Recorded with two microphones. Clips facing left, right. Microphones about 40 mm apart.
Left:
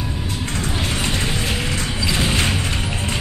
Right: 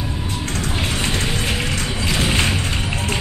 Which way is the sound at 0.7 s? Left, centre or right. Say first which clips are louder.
Even; centre.